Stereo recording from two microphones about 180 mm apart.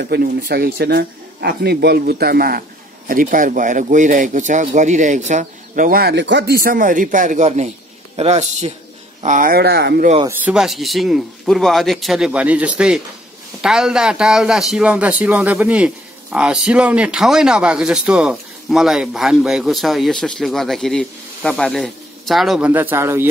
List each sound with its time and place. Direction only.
0.0 s a man's voice: 60° right (ahead or behind)
10.2 s a man's voice: 5° right (ahead or behind)
22.7 s a man's voice: 10° right (ahead or behind)